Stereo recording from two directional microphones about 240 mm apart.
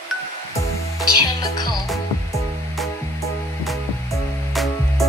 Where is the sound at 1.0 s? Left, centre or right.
Centre.